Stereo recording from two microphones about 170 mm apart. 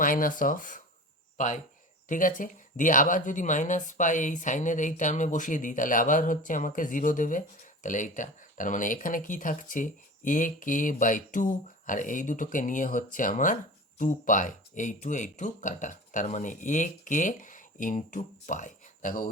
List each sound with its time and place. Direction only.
0.0 s speech: 55° left (ahead or behind)